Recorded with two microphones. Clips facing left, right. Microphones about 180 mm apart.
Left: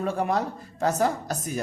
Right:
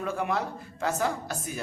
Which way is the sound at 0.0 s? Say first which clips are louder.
Left 4 dB; 35° left (ahead or behind).